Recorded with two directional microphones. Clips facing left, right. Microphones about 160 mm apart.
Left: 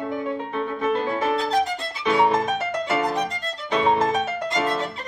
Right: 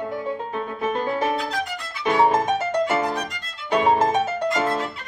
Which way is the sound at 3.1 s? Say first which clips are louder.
Left 3 dB; 25° left (ahead or behind).